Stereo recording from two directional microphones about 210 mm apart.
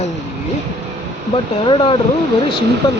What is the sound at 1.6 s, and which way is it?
Speech, 25° left (ahead or behind).